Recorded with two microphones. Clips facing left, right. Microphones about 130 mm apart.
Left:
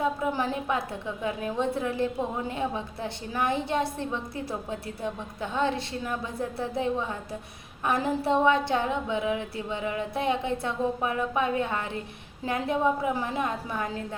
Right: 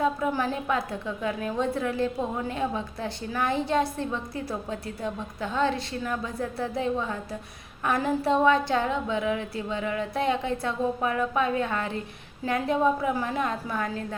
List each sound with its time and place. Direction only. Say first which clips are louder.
0.0 s a woman's voice: right 1 dB; 20° left (ahead or behind)